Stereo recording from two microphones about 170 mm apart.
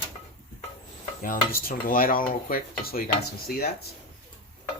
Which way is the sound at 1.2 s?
55° left (ahead or behind).